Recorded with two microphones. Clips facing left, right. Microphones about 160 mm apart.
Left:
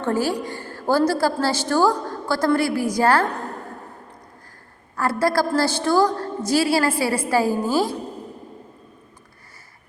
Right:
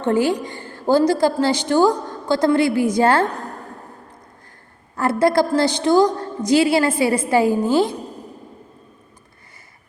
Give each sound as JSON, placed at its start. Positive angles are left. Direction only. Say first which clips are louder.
{"t": 0.0, "sound": "a woman's voice", "louder": "right 4 dB", "side_deg": -20}
{"t": 4.9, "sound": "a woman's voice", "louder": "right 4 dB", "side_deg": -20}